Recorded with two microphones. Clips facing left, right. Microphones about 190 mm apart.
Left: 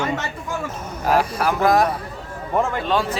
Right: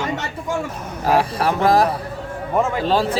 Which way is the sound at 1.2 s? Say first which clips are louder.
Right 1 dB; 30° right (ahead or behind).